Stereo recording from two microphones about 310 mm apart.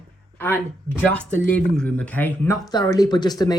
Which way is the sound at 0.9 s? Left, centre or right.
Centre.